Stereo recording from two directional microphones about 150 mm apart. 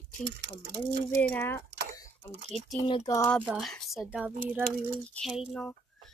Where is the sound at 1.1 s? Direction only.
10° left (ahead or behind).